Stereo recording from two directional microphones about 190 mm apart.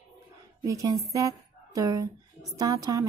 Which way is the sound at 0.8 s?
20° right (ahead or behind).